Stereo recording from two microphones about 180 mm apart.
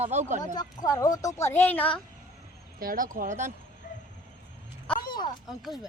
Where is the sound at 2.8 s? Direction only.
50° right (ahead or behind).